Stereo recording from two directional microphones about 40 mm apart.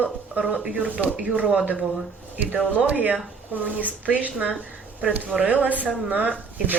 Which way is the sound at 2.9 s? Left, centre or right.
Right.